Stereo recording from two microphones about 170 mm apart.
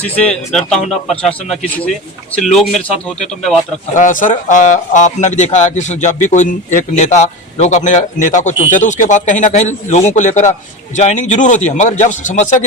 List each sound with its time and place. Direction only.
0.0 s speech: 5° left (ahead or behind)
3.9 s speech: 50° left (ahead or behind)